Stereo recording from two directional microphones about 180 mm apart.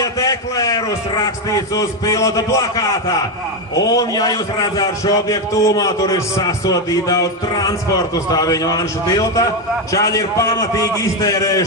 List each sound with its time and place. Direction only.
0.0 s a man's voice: 20° left (ahead or behind)